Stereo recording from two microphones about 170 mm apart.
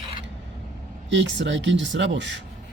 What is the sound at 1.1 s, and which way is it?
Speech, 90° right.